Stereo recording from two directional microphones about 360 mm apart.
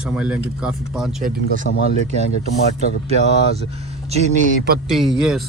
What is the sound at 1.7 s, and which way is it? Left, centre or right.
Speech, left.